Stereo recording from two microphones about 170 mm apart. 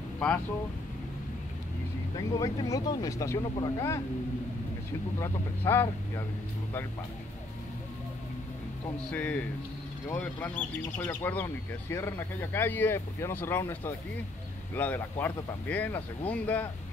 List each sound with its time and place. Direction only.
2.1 s speech: 20° left (ahead or behind)
5.7 s speech: 15° left (ahead or behind)
9.1 s speech: 10° left (ahead or behind)